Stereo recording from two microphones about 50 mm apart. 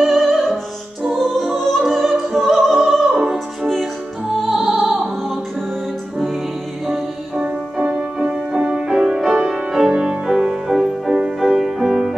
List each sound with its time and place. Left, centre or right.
0.0 s music: centre
4.4 s music: centre
7.9 s music: centre